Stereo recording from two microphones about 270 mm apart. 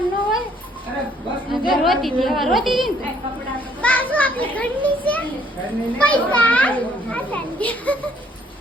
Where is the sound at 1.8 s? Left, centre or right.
Centre.